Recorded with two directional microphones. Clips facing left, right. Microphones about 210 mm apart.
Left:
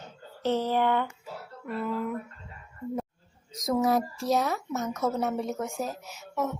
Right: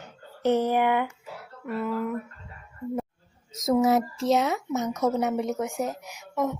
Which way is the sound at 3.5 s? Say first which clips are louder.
Right 4 dB; 25° right (ahead or behind).